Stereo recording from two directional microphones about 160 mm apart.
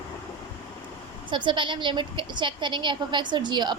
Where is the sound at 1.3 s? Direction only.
30° right (ahead or behind).